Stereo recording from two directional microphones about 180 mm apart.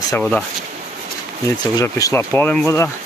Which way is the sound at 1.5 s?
20° left (ahead or behind).